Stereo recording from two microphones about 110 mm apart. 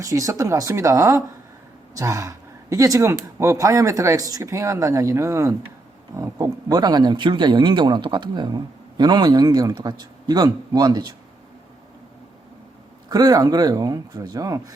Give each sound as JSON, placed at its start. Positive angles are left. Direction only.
{"t": 0.0, "sound": "speech", "side_deg": -30}
{"t": 6.7, "sound": "speech", "side_deg": -40}
{"t": 13.1, "sound": "speech", "side_deg": -35}